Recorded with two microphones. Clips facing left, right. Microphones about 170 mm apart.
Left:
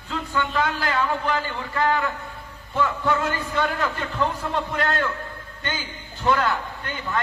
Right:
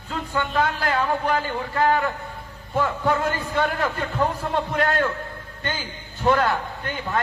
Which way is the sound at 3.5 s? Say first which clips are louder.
Right 1 dB; 45° right (ahead or behind).